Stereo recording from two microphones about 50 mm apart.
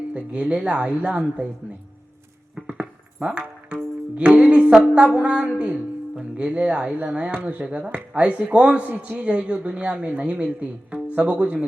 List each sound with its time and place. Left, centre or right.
0.1 s speech: right
2.6 s a sound: right
3.7 s music: right
4.9 s speech: right
10.0 s speech: right